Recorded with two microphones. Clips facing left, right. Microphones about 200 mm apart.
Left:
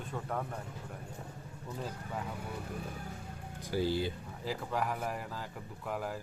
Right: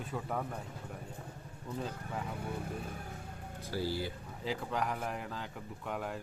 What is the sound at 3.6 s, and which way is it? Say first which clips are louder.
Speech: left 4 dB; 15° left (ahead or behind).